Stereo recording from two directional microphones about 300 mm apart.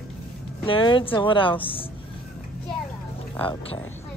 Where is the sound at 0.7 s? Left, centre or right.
Centre.